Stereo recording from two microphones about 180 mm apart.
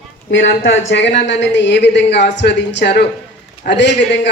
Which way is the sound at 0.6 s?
90° left.